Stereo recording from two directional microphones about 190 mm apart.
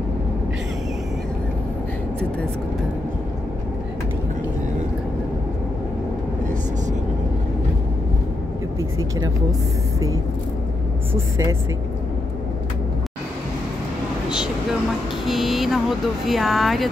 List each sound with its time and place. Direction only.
11.1 s a woman's voice: 15° right (ahead or behind)
15.2 s speech: centre (ahead or behind)